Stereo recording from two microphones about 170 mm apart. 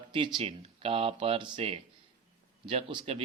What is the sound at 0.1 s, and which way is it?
Speech, 30° right (ahead or behind).